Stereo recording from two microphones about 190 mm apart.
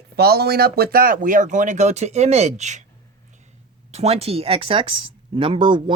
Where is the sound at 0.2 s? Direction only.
55° right (ahead or behind); by 2.8 s 40° right (ahead or behind).